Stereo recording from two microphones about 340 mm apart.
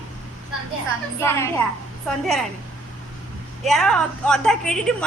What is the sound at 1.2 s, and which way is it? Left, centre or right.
Speech, centre.